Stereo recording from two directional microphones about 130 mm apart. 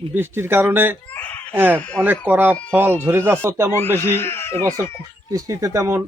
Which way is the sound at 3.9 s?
20° left (ahead or behind).